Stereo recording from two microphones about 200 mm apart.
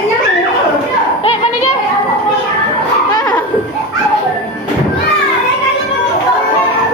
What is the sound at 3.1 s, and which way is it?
Children playing, 20° left (ahead or behind).